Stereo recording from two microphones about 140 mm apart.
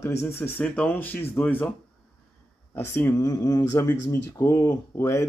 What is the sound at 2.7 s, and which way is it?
Speech, 15° left (ahead or behind).